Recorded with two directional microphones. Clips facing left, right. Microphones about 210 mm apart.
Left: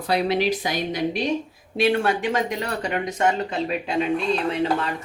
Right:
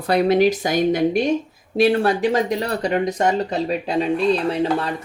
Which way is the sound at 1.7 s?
35° right (ahead or behind).